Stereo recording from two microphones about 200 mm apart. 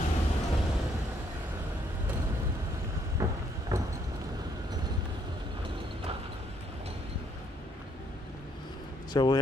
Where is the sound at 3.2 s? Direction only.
15° right (ahead or behind).